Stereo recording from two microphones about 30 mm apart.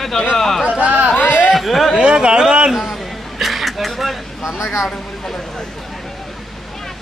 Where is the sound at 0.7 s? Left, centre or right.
Right.